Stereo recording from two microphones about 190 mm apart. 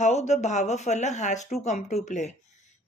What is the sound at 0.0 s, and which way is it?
Speech, 35° left (ahead or behind).